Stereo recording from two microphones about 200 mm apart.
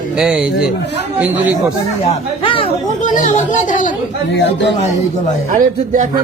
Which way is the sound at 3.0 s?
40° left (ahead or behind).